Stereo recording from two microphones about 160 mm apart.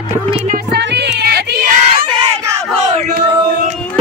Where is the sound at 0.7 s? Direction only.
90° right; by 2.1 s 65° right (ahead or behind).